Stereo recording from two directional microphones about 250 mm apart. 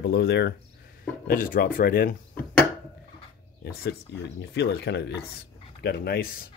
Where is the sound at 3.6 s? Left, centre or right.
Left.